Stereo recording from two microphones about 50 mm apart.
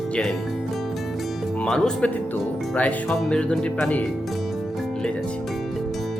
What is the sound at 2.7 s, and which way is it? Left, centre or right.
Speech, left.